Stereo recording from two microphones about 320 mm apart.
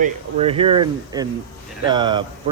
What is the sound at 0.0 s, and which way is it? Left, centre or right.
Speech, centre.